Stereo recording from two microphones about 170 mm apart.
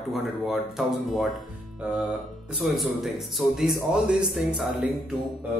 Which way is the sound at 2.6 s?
Centre (ahead or behind).